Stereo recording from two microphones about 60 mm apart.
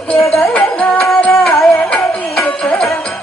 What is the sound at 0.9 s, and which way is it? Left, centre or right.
Music, centre.